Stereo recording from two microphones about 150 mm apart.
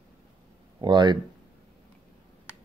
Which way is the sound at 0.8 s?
30° right (ahead or behind).